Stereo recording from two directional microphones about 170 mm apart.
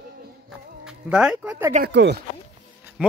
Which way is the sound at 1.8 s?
80° right.